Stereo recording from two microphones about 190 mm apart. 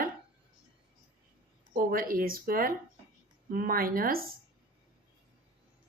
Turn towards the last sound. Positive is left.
turn(degrees=-50)  # may be behind; listen again after turning